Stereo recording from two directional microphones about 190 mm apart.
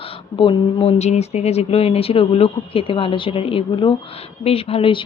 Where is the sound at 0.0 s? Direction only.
30° left (ahead or behind).